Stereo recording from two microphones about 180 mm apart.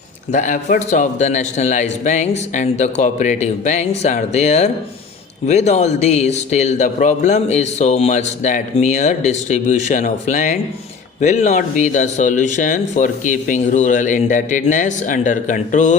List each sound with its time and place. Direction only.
0.3 s a man's voice: 45° left (ahead or behind)